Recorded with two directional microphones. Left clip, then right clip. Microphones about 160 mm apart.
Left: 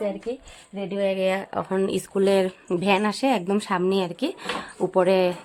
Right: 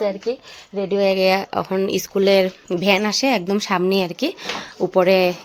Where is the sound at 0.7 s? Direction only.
35° right (ahead or behind).